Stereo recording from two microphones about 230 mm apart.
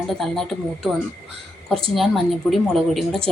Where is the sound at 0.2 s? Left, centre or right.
Centre.